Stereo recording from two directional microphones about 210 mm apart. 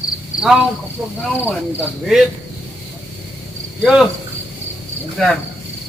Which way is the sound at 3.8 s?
Centre (ahead or behind).